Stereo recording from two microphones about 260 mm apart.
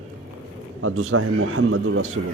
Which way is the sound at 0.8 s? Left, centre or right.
Right.